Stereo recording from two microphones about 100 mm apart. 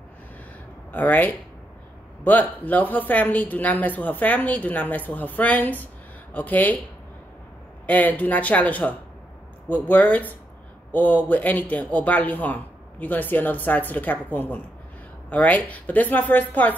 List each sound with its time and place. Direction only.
0.9 s a woman's voice: 20° left (ahead or behind)
7.8 s a woman's voice: 15° left (ahead or behind)